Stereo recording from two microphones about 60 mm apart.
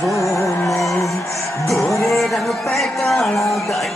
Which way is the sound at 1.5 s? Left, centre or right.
Left.